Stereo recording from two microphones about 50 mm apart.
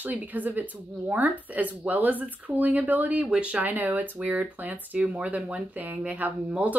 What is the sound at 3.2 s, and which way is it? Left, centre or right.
A woman's voice, right.